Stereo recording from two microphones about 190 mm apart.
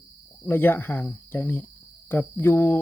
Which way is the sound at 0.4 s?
10° left (ahead or behind).